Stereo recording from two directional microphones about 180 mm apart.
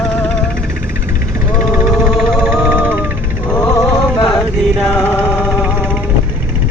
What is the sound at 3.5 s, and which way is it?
Music, 5° left (ahead or behind).